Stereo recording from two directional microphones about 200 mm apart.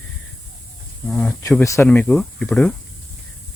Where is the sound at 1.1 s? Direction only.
5° left (ahead or behind).